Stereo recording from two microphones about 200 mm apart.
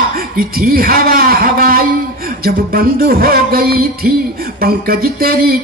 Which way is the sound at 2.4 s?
50° right (ahead or behind).